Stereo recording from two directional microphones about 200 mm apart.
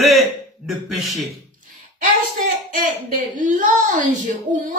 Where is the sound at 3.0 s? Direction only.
40° right (ahead or behind).